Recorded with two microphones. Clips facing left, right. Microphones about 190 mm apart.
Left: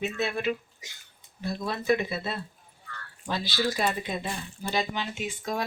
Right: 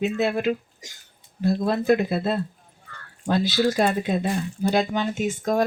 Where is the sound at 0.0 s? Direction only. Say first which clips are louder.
Right 6 dB; 40° right (ahead or behind).